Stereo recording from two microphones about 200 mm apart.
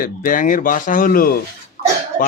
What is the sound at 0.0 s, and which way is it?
Speech, 45° left (ahead or behind).